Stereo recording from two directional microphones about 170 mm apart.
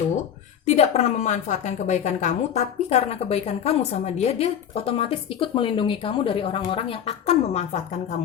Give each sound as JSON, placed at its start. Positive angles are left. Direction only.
{"t": 0.6, "sound": "a woman's voice", "side_deg": 40}